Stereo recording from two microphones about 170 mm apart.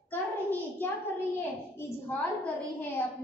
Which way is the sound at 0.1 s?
10° left (ahead or behind).